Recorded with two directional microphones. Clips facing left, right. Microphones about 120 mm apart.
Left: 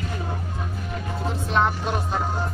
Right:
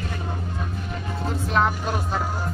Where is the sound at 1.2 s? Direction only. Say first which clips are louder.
Even; centre (ahead or behind).